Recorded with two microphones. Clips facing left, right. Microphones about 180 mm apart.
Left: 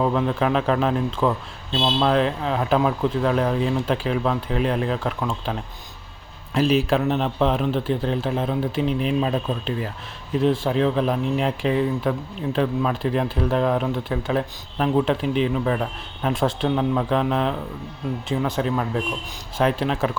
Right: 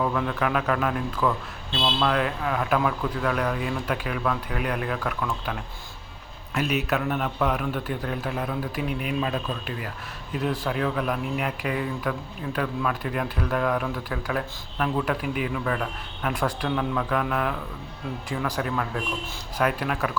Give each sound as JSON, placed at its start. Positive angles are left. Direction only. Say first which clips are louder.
{"t": 0.0, "sound": "speech", "louder": "left 4 dB", "side_deg": 25}